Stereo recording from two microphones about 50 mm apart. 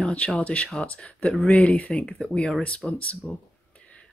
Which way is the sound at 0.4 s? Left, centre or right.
Left.